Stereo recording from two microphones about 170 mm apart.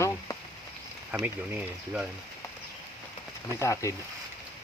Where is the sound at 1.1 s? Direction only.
10° right (ahead or behind).